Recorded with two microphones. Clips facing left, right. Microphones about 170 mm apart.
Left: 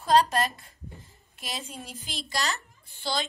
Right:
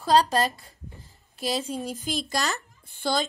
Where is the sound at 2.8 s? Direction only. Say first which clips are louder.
Right 5 dB; 50° right (ahead or behind).